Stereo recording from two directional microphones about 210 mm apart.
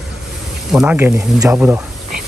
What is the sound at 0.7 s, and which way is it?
Speech, 5° right (ahead or behind).